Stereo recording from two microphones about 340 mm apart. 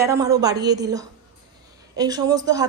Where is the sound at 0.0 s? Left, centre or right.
Centre.